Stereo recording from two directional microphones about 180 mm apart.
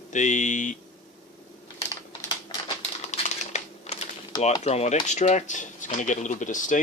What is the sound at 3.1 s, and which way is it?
Crumpling, 40° left (ahead or behind).